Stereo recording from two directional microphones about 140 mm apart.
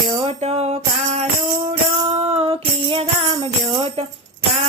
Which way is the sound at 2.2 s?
45° right (ahead or behind).